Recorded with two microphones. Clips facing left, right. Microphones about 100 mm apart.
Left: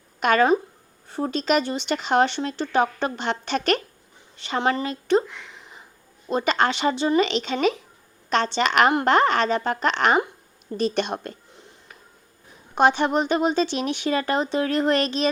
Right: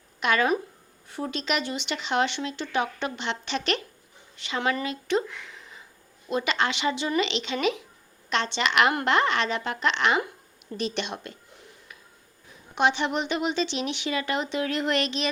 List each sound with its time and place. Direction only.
0.2 s speech: 45° left (ahead or behind)
5.5 s a sound: 25° left (ahead or behind)
6.2 s a woman's voice: 40° left (ahead or behind)
12.7 s speech: 45° left (ahead or behind)